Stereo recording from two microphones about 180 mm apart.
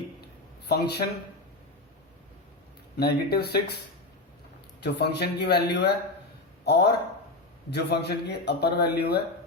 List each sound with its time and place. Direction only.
0.7 s a man's voice: 65° left (ahead or behind)
3.0 s a man's voice: 60° left (ahead or behind)
4.8 s a man's voice: 65° left (ahead or behind)